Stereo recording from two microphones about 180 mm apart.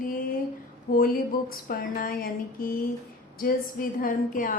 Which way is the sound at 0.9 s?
50° left (ahead or behind).